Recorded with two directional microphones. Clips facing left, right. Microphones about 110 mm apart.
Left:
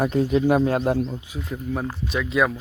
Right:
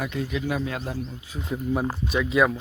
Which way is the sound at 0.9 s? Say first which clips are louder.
Left 9 dB; 60° left (ahead or behind).